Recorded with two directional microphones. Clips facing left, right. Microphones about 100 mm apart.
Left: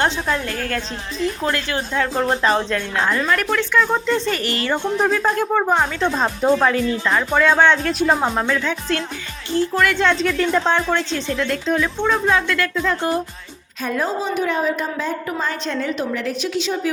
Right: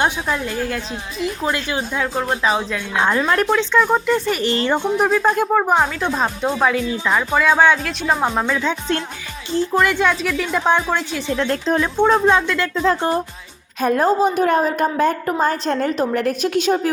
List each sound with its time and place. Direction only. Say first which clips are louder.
0.0 s speech: even; 15° right (ahead or behind)
2.1 s speech: left 1 dB; centre (ahead or behind)
3.2 s music: right 3 dB; 25° right (ahead or behind)
3.9 s speech: right 2 dB; 10° right (ahead or behind)
11.3 s speech: right 2 dB; 30° right (ahead or behind)
12.2 s music: right 2 dB; 20° right (ahead or behind)
13.8 s a woman's voice: right 6 dB; 50° right (ahead or behind)